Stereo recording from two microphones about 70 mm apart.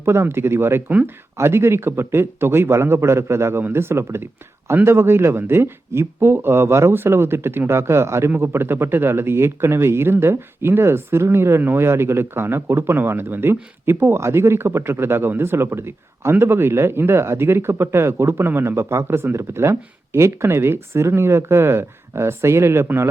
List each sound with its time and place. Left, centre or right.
0.0 s speech: right
0.9 s speech: right
1.4 s speech: right